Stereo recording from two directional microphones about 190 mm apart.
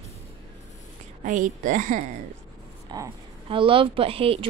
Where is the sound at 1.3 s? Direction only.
45° right (ahead or behind).